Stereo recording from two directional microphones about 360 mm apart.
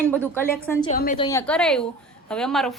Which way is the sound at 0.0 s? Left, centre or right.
Centre.